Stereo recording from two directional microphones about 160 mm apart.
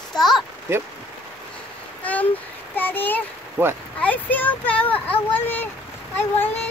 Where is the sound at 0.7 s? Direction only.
15° right (ahead or behind).